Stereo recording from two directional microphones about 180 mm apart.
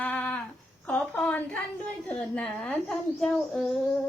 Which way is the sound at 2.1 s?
5° left (ahead or behind).